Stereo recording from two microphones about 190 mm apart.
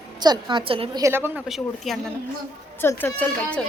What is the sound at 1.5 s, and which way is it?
Speech, centre (ahead or behind).